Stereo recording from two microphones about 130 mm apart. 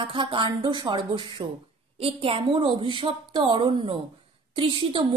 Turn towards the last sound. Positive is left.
turn(degrees=-40)  # may be behind; listen again after turning